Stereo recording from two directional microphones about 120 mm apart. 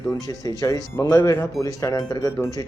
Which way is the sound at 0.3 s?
30° left (ahead or behind).